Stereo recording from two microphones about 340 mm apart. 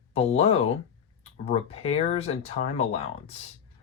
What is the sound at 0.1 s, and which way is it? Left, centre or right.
Speech, centre.